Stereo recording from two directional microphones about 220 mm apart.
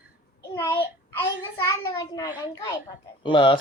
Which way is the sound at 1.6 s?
15° left (ahead or behind).